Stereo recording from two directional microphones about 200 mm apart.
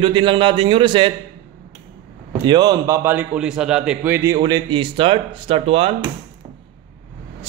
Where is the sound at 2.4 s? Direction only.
20° right (ahead or behind).